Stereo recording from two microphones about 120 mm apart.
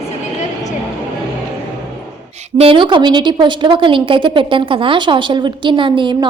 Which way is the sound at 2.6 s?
45° right (ahead or behind).